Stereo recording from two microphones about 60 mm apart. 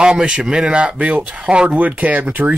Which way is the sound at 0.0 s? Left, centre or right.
Centre.